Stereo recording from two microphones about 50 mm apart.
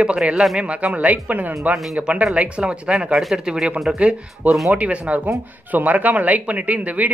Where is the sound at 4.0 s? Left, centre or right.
Right.